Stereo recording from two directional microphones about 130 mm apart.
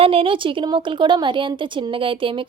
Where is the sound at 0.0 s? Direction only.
45° right (ahead or behind).